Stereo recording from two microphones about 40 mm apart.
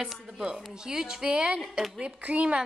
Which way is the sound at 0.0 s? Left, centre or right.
Centre.